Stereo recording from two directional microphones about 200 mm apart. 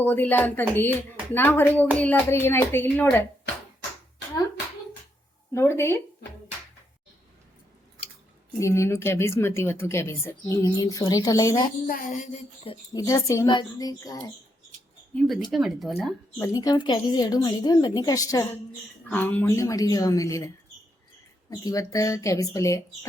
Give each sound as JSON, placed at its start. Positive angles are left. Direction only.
{"t": 0.0, "sound": "a woman's voice", "side_deg": 10}
{"t": 5.5, "sound": "a woman's voice", "side_deg": 15}
{"t": 8.5, "sound": "a woman's voice", "side_deg": 15}
{"t": 11.9, "sound": "speech", "side_deg": 45}
{"t": 12.9, "sound": "a woman's voice", "side_deg": 15}
{"t": 15.4, "sound": "speech", "side_deg": 0}
{"t": 16.4, "sound": "a woman's voice", "side_deg": 20}
{"t": 21.5, "sound": "a woman's voice", "side_deg": 20}